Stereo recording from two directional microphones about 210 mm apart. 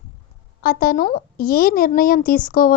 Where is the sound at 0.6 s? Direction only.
45° left (ahead or behind).